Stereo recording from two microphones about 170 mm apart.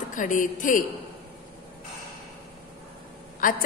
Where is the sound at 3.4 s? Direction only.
55° left (ahead or behind).